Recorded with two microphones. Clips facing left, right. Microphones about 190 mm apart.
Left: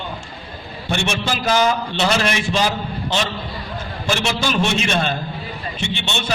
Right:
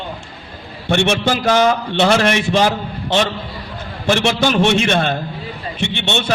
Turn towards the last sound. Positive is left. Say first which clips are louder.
# right 5 dB
turn(degrees=-60)  # may be behind; listen again after turning